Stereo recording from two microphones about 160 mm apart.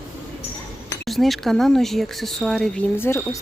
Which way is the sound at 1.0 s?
Centre (ahead or behind).